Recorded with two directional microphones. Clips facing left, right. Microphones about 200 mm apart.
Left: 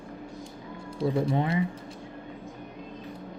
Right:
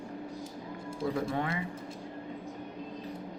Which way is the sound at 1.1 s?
25° left (ahead or behind).